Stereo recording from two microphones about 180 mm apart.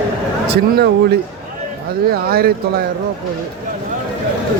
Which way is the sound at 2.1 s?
55° right (ahead or behind).